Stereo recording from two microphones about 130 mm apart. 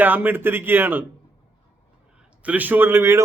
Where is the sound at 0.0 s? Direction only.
15° right (ahead or behind).